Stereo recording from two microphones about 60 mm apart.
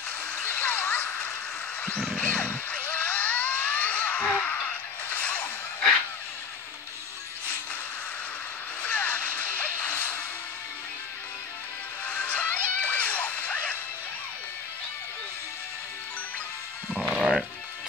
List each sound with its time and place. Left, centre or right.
0.4 s a sound: left
8.8 s music: left
12.1 s music: left
17.1 s sheep: centre